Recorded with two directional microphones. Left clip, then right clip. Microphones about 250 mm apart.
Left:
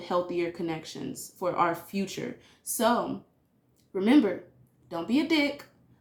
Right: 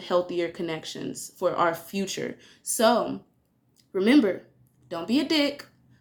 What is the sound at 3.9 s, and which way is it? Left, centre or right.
Speech, centre.